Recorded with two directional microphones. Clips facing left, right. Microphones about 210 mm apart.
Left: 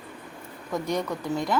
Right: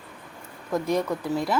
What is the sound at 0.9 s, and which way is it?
Speech, 5° right (ahead or behind).